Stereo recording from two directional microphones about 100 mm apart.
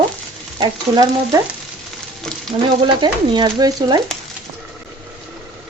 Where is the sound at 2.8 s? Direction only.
50° right (ahead or behind).